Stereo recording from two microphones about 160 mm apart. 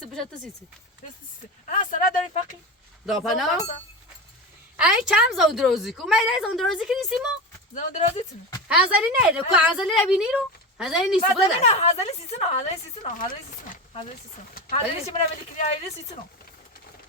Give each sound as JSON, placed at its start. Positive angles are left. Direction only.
{"t": 1.6, "sound": "speech", "side_deg": 55}
{"t": 3.1, "sound": "a woman's voice", "side_deg": 0}
{"t": 4.8, "sound": "a woman's voice", "side_deg": -5}
{"t": 7.7, "sound": "a woman's voice", "side_deg": 50}
{"t": 8.6, "sound": "a woman's voice", "side_deg": -5}
{"t": 11.6, "sound": "a woman's voice", "side_deg": 45}
{"t": 13.1, "sound": "speech", "side_deg": 60}
{"t": 14.7, "sound": "a woman's voice", "side_deg": 40}